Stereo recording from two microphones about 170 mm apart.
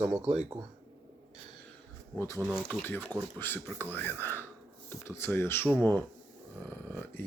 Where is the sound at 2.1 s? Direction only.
15° left (ahead or behind).